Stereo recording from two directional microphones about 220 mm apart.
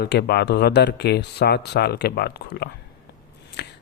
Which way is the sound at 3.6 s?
50° left (ahead or behind).